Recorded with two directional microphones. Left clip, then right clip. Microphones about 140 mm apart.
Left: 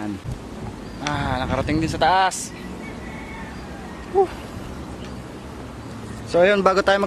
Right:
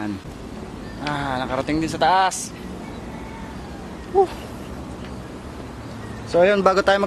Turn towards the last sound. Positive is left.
turn(degrees=0)  # may be behind; listen again after turning